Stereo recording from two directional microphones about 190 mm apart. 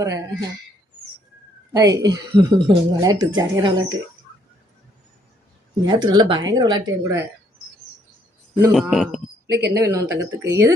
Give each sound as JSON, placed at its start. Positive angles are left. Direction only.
{"t": 1.7, "sound": "speech", "side_deg": -20}
{"t": 5.8, "sound": "speech", "side_deg": -20}
{"t": 8.7, "sound": "speech", "side_deg": 0}
{"t": 9.5, "sound": "speech", "side_deg": -60}
{"t": 9.7, "sound": "speech", "side_deg": -15}